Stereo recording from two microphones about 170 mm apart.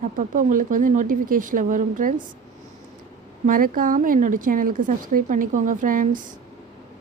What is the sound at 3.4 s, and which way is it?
Speech, 55° right (ahead or behind).